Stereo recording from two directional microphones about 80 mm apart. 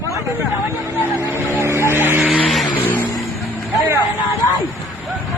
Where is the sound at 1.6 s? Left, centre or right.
Right.